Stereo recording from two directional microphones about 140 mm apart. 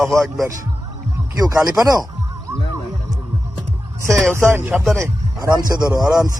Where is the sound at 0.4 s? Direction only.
25° right (ahead or behind).